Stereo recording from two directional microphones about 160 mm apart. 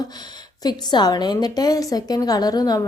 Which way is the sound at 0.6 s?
25° left (ahead or behind).